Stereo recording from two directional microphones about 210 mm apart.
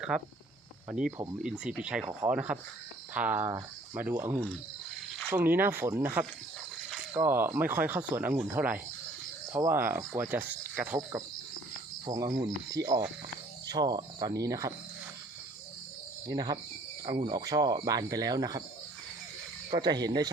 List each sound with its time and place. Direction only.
0.1 s speech: 5° right (ahead or behind)
12.0 s speech: 20° right (ahead or behind)
16.2 s speech: 20° right (ahead or behind)
19.7 s speech: 20° right (ahead or behind)